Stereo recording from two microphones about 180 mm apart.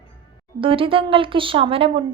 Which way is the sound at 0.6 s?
30° right (ahead or behind).